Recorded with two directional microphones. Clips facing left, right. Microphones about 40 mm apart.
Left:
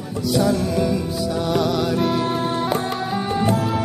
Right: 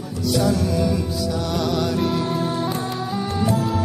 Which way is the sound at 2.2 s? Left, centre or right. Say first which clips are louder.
Left 1 dB; left.